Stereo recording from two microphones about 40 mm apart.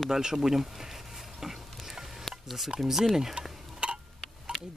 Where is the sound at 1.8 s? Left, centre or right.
Centre.